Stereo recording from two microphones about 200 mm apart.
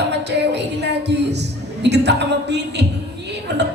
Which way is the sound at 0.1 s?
60° right (ahead or behind).